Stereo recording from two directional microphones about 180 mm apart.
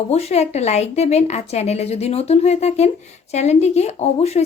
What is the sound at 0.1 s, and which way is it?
Speech, 35° left (ahead or behind).